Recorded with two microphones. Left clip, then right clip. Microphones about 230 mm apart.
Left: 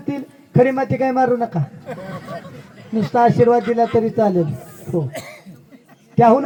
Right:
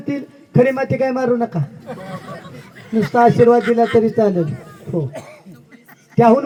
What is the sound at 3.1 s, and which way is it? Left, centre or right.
A man's voice, right.